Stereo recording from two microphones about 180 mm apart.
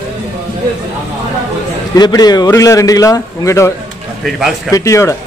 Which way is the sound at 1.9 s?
20° left (ahead or behind).